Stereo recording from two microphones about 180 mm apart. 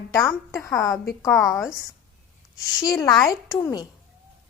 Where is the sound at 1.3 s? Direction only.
Centre (ahead or behind).